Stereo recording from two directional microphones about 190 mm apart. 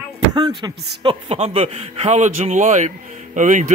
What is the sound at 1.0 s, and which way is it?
A man's voice, 30° right (ahead or behind).